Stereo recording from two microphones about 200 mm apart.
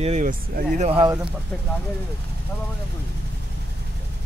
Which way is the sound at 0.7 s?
30° right (ahead or behind).